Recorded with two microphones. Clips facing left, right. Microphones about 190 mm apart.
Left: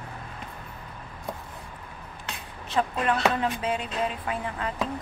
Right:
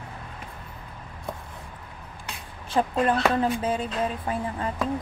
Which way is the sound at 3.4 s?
35° right (ahead or behind).